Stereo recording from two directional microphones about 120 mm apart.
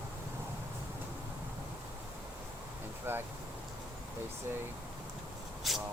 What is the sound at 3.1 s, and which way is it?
Speech, 20° right (ahead or behind).